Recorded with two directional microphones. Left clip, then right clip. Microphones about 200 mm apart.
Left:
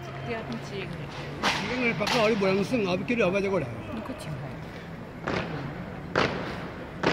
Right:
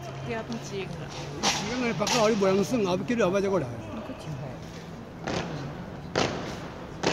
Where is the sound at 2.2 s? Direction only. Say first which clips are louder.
Right 1 dB; 40° right (ahead or behind).